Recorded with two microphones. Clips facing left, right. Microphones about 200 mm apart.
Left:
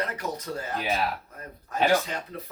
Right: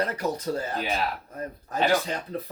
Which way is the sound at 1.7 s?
35° right (ahead or behind).